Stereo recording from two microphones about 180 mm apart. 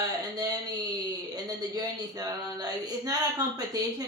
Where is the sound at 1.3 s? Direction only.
20° right (ahead or behind).